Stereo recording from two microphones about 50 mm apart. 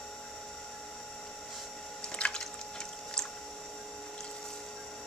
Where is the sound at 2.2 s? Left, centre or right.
Centre.